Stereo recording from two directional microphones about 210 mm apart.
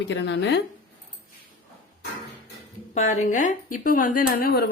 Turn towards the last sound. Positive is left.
turn(degrees=45)  # may be behind; listen again after turning